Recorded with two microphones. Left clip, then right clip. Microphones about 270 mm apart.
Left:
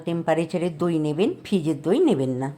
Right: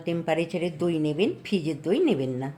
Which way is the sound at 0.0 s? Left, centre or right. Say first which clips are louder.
Left 3 dB; centre.